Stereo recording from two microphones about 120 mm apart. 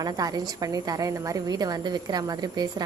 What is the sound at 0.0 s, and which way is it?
A woman's voice, 30° right (ahead or behind).